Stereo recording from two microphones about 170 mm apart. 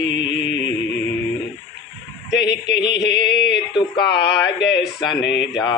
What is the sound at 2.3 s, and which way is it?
Mantra, 90° left.